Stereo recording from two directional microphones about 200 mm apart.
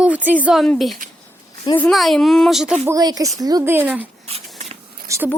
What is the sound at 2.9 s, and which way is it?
Speech, 20° right (ahead or behind).